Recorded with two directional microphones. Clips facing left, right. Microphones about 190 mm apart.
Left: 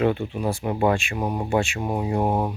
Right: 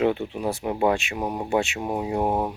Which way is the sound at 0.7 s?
Centre (ahead or behind).